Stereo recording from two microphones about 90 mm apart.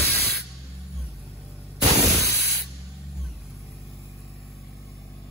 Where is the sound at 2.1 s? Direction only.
35° left (ahead or behind).